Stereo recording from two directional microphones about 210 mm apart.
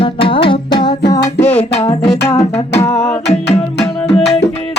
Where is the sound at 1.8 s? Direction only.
25° left (ahead or behind).